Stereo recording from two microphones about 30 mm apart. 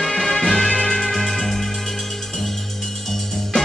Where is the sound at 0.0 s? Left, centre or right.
Centre.